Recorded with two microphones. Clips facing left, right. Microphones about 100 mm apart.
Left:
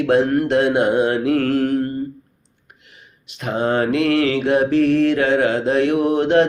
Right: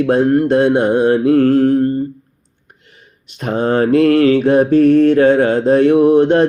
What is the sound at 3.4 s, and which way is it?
Mantra, 45° right (ahead or behind).